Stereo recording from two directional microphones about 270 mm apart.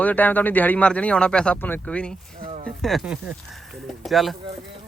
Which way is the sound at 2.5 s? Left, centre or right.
Right.